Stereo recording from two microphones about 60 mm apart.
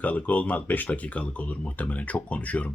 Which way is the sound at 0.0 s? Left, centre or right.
Left.